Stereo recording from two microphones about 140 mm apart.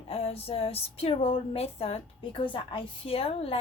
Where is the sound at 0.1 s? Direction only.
45° left (ahead or behind).